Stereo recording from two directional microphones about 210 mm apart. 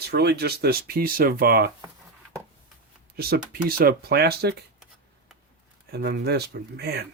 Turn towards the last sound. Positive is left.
turn(degrees=-50)  # may be behind; listen again after turning